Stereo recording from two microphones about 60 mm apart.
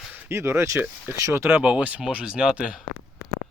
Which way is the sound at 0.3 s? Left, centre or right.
Right.